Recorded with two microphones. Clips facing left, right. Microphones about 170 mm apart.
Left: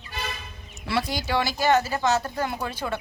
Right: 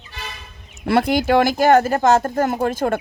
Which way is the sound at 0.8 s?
55° right (ahead or behind).